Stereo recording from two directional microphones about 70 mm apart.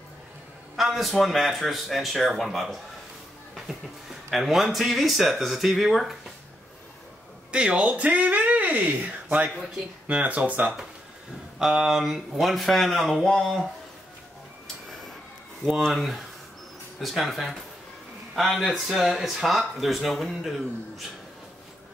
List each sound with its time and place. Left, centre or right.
0.7 s speech: centre
4.3 s speech: centre
7.5 s speech: centre
11.6 s speech: centre
15.9 s speech: centre